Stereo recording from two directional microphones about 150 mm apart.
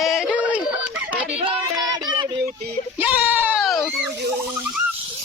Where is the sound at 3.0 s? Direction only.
10° right (ahead or behind).